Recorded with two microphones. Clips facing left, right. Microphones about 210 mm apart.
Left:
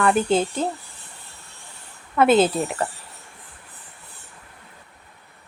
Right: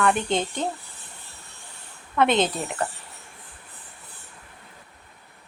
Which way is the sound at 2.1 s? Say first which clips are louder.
Left 5 dB; 5° left (ahead or behind).